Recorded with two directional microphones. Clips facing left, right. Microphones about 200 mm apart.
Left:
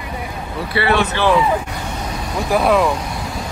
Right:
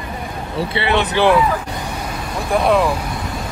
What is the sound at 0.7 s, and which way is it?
Speech, 20° right (ahead or behind).